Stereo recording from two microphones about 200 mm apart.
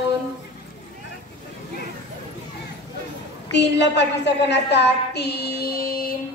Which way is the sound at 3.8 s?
60° left (ahead or behind).